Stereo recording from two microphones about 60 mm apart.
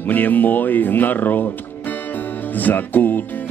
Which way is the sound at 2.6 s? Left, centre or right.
Left.